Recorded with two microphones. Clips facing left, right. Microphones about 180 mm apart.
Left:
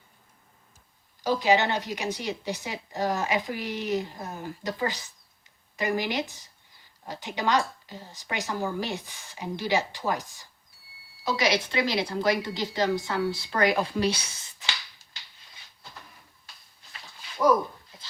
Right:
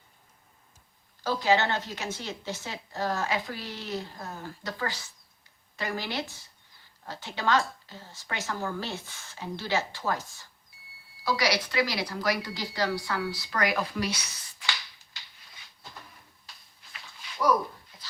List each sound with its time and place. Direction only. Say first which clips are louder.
1.2 s a woman's voice: left 2 dB; 15° left (ahead or behind)